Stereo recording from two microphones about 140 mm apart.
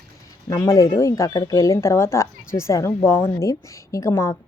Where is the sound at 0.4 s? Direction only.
25° left (ahead or behind).